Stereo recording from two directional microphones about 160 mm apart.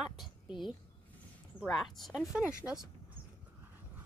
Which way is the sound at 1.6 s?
Centre (ahead or behind).